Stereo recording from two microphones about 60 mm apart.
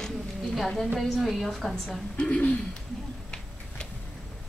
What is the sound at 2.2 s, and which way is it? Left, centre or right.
Speech, centre.